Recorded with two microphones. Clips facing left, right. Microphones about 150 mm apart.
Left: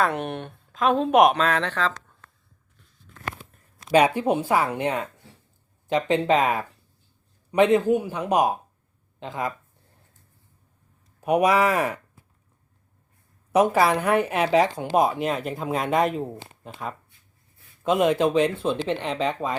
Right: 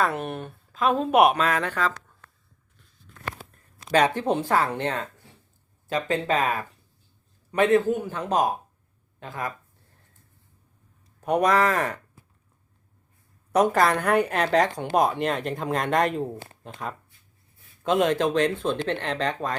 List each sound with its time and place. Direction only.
0.0 s a woman's voice: centre (ahead or behind)
3.9 s speech: 10° left (ahead or behind)
11.2 s speech: 10° left (ahead or behind)
13.5 s a woman's voice: 5° left (ahead or behind)
17.8 s a woman's voice: 5° left (ahead or behind)